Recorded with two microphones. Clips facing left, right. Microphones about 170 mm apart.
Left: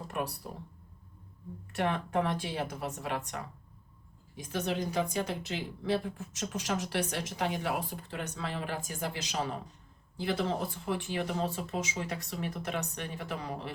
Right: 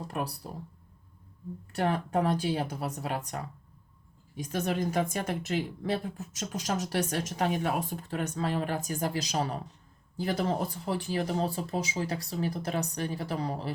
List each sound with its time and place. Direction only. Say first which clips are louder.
1.7 s speech: right 2 dB; 35° right (ahead or behind)
4.5 s a woman's voice: right 2 dB; 50° right (ahead or behind)